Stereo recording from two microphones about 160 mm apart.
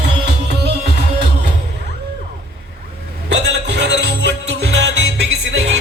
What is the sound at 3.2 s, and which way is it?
Music, 90° right.